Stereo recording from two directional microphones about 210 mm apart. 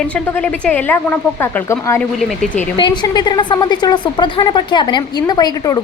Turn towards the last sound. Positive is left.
turn(degrees=20)  # may be behind; listen again after turning